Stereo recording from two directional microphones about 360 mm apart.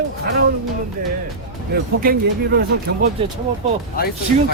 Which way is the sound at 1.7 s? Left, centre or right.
Right.